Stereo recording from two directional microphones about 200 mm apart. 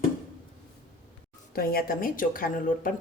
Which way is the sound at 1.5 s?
50° left (ahead or behind).